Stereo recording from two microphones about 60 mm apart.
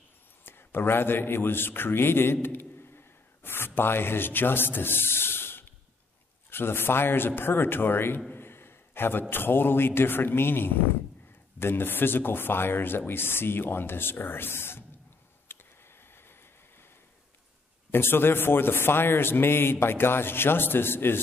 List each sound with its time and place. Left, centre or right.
0.5 s speech: left
3.4 s speech: left
8.3 s a sound: left
9.3 s speech: left
15.5 s a sound: left
17.9 s speech: left